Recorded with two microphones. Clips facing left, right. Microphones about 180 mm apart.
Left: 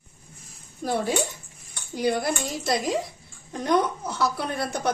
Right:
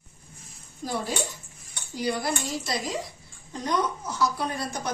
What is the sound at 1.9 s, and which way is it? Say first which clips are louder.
Speech: left 3 dB; 55° left (ahead or behind).